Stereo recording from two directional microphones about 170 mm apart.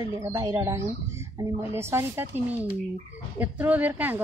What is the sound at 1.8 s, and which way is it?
Speech, 15° right (ahead or behind).